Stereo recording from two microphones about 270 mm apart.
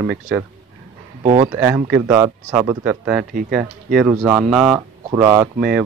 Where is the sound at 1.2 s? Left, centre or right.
Right.